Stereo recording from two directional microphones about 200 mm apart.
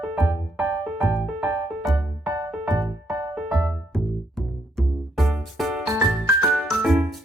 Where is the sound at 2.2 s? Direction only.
15° right (ahead or behind).